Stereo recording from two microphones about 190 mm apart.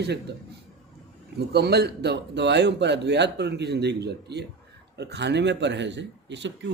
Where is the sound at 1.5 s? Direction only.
60° right (ahead or behind).